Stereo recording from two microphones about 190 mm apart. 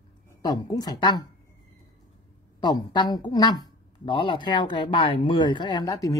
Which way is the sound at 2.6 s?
20° left (ahead or behind).